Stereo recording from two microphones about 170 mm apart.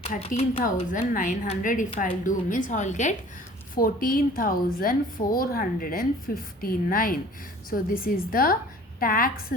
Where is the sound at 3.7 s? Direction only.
55° left (ahead or behind).